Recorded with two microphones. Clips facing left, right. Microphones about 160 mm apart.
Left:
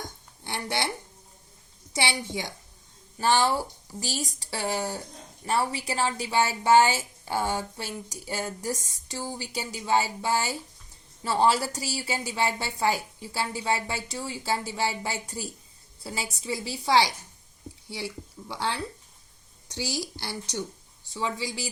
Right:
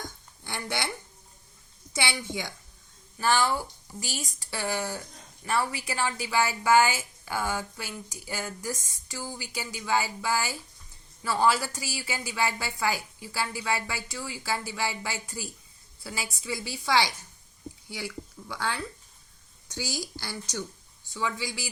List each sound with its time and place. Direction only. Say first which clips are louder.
0.4 s speech: left 3 dB; 25° left (ahead or behind)
1.9 s a woman's voice: left 2 dB; 30° left (ahead or behind)